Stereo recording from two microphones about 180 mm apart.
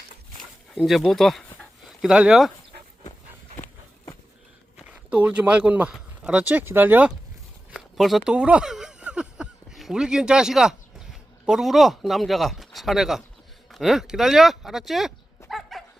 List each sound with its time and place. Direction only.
0.7 s speech: centre (ahead or behind)
3.6 s run: 15° left (ahead or behind)
4.9 s speech: 10° right (ahead or behind)
7.7 s a sound: centre (ahead or behind)
13.7 s speech: centre (ahead or behind)
15.4 s dog: centre (ahead or behind)